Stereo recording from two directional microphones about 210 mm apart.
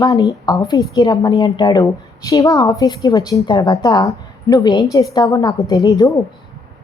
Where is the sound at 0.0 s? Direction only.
20° left (ahead or behind).